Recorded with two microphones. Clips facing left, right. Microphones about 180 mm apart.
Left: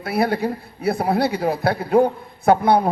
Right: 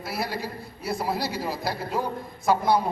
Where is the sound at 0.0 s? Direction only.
60° left (ahead or behind).